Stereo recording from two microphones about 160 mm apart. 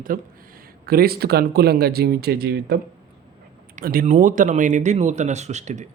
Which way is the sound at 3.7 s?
65° right (ahead or behind).